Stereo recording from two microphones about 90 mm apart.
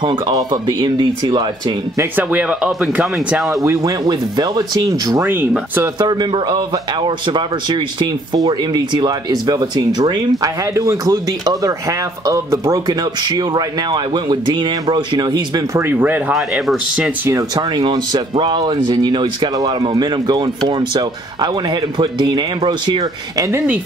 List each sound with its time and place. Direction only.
0.3 s speech: 40° right (ahead or behind)
0.7 s speech: 55° right (ahead or behind)
2.1 s speech: 15° right (ahead or behind)
3.6 s speech: 35° right (ahead or behind)
4.1 s speech: 50° right (ahead or behind)
5.1 s speech: 30° right (ahead or behind)
5.9 s speech: 55° right (ahead or behind)
15.7 s speech: 25° right (ahead or behind)
16.3 s speech: centre (ahead or behind)
17.6 s speech: 55° right (ahead or behind)